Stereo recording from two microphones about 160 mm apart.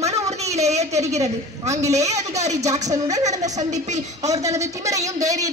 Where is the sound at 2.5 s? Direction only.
20° right (ahead or behind).